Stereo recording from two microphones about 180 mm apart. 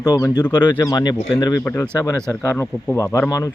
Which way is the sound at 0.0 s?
20° left (ahead or behind).